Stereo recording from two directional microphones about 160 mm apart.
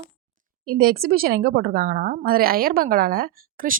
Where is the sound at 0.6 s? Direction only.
70° right (ahead or behind).